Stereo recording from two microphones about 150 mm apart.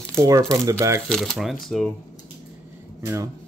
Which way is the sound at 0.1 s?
20° right (ahead or behind).